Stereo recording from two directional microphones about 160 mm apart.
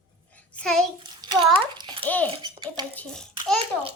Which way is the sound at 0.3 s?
5° left (ahead or behind).